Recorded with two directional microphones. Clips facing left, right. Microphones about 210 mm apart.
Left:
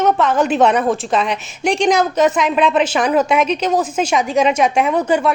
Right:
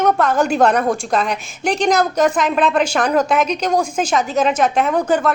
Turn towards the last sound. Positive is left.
turn(degrees=10)  # may be behind; listen again after turning